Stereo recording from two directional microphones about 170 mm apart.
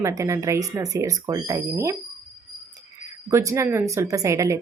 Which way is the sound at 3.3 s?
15° right (ahead or behind).